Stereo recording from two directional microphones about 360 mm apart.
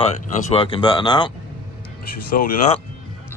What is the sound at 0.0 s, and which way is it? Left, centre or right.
Speech, centre.